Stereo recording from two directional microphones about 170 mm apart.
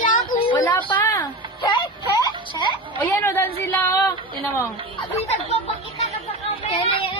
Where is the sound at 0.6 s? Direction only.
10° left (ahead or behind).